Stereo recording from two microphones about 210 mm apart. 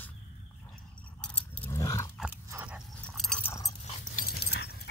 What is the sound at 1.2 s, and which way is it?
Keys jangling, 5° left (ahead or behind).